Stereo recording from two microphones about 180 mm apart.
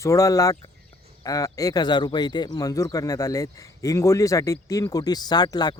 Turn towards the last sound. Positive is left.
turn(degrees=20)  # may be behind; listen again after turning